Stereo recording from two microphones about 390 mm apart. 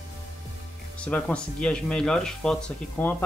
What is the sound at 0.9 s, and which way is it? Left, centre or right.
Speech, centre.